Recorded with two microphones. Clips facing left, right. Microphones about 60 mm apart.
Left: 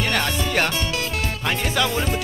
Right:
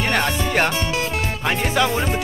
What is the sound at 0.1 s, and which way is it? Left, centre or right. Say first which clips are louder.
Music: right 2 dB; centre.